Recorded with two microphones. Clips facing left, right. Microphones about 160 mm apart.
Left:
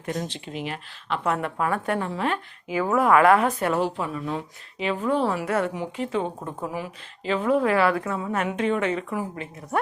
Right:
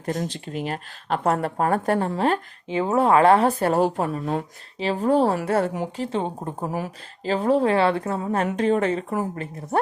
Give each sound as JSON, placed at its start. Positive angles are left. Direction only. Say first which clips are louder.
{"t": 0.0, "sound": "speech", "louder": "right 3 dB", "side_deg": -40}
{"t": 5.5, "sound": "speech", "louder": "right 3 dB", "side_deg": -35}